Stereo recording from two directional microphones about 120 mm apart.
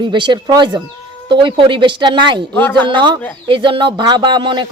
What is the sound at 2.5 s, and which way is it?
Speech, 15° left (ahead or behind).